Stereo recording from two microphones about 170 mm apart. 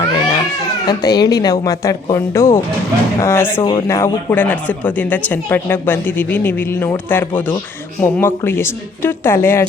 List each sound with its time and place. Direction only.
0.9 s a woman's voice: 25° left (ahead or behind)
3.6 s speech: 30° left (ahead or behind)
3.8 s speech: 15° left (ahead or behind)